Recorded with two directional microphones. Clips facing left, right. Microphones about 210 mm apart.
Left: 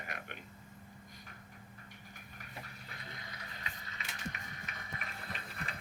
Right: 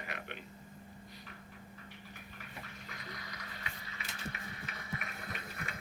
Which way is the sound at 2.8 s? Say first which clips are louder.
Right 2 dB; 25° left (ahead or behind).